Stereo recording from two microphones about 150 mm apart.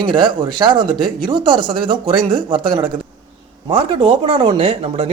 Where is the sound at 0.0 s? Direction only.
30° right (ahead or behind).